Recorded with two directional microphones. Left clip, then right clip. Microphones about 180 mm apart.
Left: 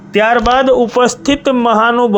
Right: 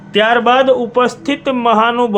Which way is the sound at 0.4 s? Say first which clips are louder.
Left 1 dB; 35° left (ahead or behind).